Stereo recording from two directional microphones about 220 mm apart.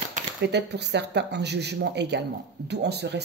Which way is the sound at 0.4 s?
50° right (ahead or behind).